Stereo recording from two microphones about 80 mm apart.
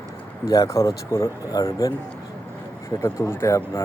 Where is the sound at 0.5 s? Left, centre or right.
Left.